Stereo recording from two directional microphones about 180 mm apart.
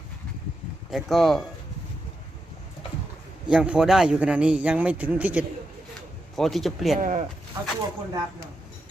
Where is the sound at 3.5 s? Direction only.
5° right (ahead or behind).